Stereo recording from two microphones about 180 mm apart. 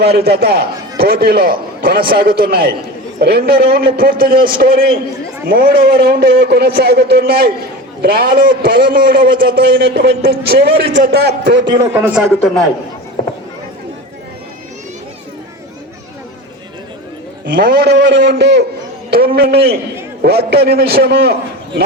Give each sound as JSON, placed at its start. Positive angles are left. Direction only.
{"t": 0.0, "sound": "a man's voice", "side_deg": -60}
{"t": 11.7, "sound": "a man's voice", "side_deg": -15}
{"t": 17.5, "sound": "a man's voice", "side_deg": -55}
{"t": 19.1, "sound": "a man's voice", "side_deg": -55}